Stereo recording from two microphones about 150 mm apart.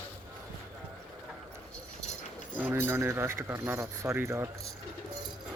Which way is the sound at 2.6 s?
15° right (ahead or behind).